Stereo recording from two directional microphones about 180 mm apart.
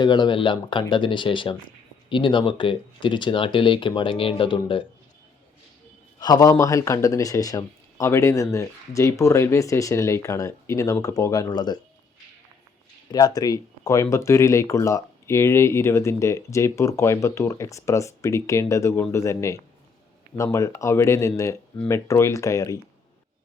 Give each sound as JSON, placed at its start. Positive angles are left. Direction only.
{"t": 0.0, "sound": "speech", "side_deg": 25}
{"t": 6.1, "sound": "speech", "side_deg": 20}
{"t": 13.1, "sound": "speech", "side_deg": 20}